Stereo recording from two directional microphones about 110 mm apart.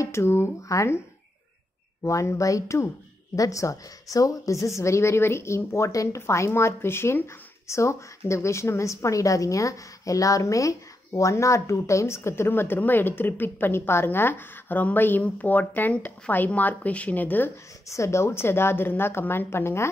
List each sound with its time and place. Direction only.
0.0 s a woman's voice: 25° left (ahead or behind)
2.0 s a woman's voice: 30° left (ahead or behind)
17.8 s a woman's voice: 25° left (ahead or behind)